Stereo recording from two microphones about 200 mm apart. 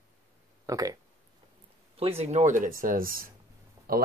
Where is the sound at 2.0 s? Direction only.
30° right (ahead or behind); by 3.3 s 45° right (ahead or behind).